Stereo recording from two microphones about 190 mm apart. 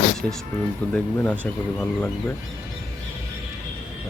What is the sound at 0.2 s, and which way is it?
Speech, centre (ahead or behind).